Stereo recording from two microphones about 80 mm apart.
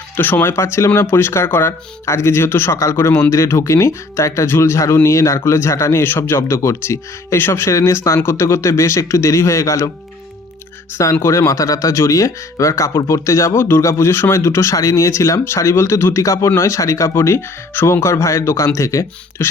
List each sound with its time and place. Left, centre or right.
0.2 s speech: left
10.9 s speech: left